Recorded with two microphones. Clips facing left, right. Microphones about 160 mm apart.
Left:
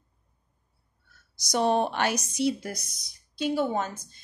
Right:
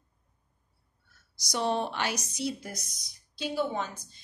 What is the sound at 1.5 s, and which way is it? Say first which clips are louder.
Speech: left 5 dB; 50° left (ahead or behind).